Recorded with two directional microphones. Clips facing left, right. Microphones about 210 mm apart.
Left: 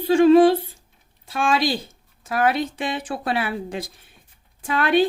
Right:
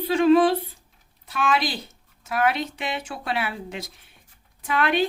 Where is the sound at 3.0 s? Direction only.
45° left (ahead or behind).